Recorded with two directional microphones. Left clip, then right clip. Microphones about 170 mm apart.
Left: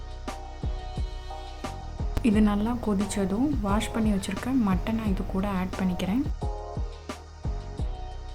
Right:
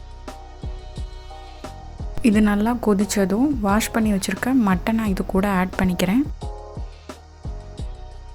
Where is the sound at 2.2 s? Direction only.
30° right (ahead or behind).